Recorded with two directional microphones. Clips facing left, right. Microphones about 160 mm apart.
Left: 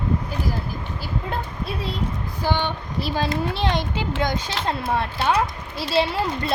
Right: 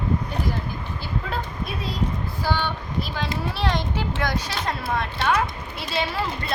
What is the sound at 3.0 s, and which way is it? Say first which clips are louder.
Speech: left 5 dB; 30° left (ahead or behind).